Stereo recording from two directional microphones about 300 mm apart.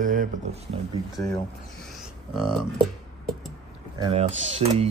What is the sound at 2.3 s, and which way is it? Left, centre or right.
Speech, centre.